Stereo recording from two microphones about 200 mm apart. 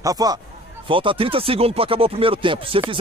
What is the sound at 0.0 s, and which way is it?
Speech, 20° right (ahead or behind).